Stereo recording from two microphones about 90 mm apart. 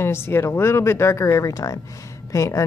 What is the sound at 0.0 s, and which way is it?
A woman's voice, 25° left (ahead or behind).